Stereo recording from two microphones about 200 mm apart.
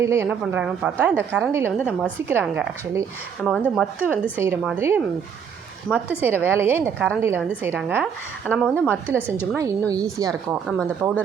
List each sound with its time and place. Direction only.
0.0 s a woman's voice: 15° right (ahead or behind)
0.3 s a woman's voice: 5° right (ahead or behind)
9.6 s a woman's voice: 15° right (ahead or behind)
10.7 s speech: 5° left (ahead or behind)